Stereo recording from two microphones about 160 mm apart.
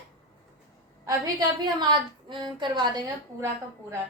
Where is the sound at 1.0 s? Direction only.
25° right (ahead or behind).